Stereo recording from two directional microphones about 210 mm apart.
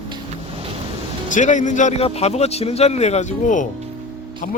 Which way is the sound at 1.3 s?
35° left (ahead or behind).